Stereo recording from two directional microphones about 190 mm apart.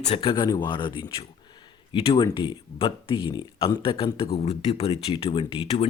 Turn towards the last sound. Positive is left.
turn(degrees=30)  # may be behind; listen again after turning